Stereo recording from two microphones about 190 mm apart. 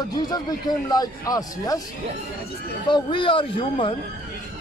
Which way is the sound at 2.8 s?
25° left (ahead or behind).